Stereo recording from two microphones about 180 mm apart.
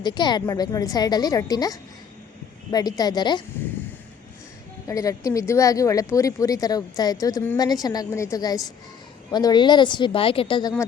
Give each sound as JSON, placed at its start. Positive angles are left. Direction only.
{"t": 0.0, "sound": "speech", "side_deg": 25}
{"t": 4.9, "sound": "speech", "side_deg": 20}